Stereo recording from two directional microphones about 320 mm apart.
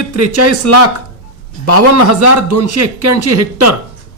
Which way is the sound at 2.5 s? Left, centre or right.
Right.